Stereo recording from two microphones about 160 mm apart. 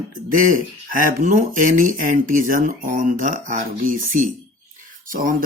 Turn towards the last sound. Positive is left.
turn(degrees=-60)  # may be behind; listen again after turning